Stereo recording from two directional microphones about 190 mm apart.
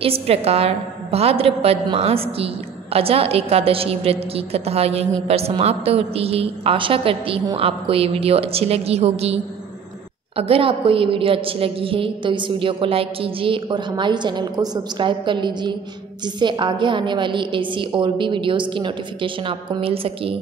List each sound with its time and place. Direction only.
0.0 s a woman's voice: 30° right (ahead or behind)